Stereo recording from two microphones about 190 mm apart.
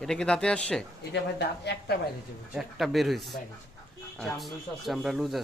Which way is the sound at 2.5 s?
Centre (ahead or behind).